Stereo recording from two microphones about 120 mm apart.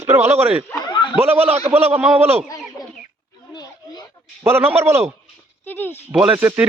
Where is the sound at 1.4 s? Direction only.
60° right (ahead or behind).